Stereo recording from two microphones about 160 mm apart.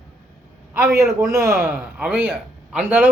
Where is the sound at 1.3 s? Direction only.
20° right (ahead or behind).